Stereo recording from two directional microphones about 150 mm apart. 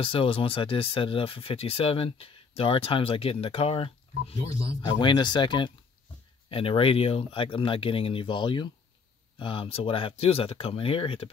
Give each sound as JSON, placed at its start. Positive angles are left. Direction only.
{"t": 0.0, "sound": "speech", "side_deg": 35}
{"t": 4.8, "sound": "speech", "side_deg": 30}